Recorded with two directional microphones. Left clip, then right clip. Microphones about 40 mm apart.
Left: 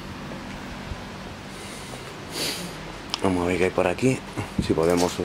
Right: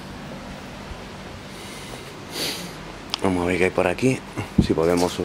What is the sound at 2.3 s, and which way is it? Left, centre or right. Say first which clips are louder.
Snort: right 1 dB; centre.